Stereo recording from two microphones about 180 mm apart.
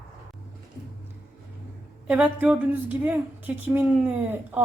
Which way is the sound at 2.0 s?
10° right (ahead or behind).